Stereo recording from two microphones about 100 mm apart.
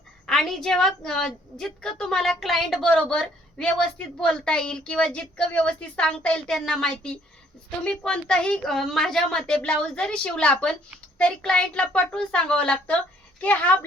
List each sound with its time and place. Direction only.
0.3 s a woman's voice: 5° left (ahead or behind)